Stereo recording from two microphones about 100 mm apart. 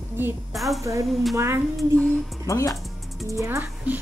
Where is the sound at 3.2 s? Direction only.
30° right (ahead or behind).